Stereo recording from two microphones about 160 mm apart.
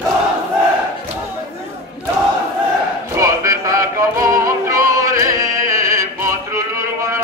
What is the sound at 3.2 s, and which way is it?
Music, 20° right (ahead or behind).